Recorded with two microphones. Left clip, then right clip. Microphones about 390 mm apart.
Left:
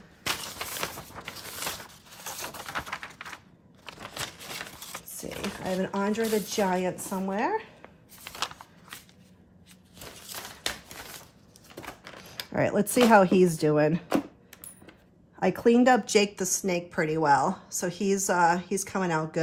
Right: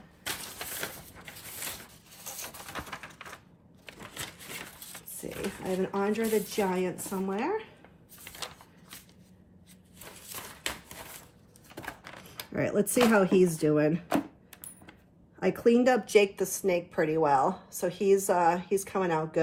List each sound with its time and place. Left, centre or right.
0.3 s a sound: centre
1.7 s typewriter: centre
3.8 s a sound: centre
5.8 s speech: left
8.2 s shuffling cards: centre
11.7 s power windows: centre
12.5 s speech: left
13.9 s a sound: centre
15.4 s speech: left